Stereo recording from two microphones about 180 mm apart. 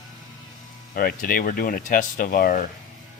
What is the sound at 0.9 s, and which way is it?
Speech, 55° left (ahead or behind).